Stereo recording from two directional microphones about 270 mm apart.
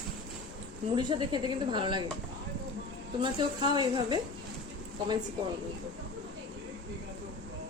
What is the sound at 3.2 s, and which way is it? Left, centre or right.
Speech, centre.